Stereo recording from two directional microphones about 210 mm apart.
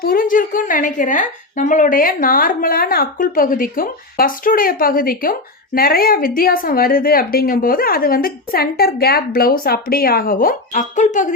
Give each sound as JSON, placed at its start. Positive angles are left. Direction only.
{"t": 0.0, "sound": "a woman's voice", "side_deg": 40}